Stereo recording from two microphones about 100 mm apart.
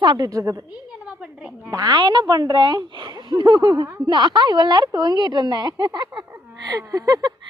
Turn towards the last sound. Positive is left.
turn(degrees=-40)  # may be behind; listen again after turning